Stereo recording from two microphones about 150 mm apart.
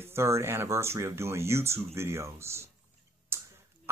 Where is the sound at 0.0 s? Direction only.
15° right (ahead or behind).